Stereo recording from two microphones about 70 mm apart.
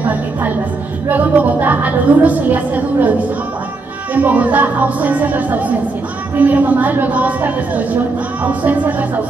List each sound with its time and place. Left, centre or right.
0.0 s music: right
1.0 s a woman's voice: right